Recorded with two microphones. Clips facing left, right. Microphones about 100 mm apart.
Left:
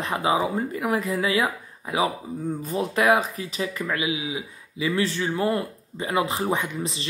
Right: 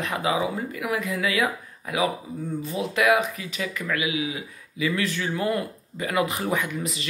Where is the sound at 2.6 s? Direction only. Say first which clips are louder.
Left 1 dB; 40° left (ahead or behind).